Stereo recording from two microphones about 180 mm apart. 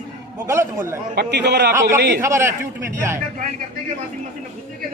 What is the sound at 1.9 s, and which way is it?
Speech, 65° right (ahead or behind).